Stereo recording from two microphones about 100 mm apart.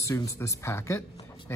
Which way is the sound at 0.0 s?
30° left (ahead or behind).